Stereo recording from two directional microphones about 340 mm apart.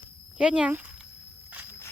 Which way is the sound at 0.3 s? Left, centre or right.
Centre.